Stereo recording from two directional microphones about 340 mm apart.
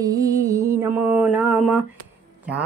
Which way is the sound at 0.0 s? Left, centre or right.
Centre.